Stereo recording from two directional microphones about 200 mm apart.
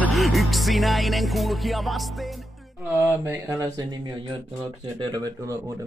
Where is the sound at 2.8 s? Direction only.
15° right (ahead or behind).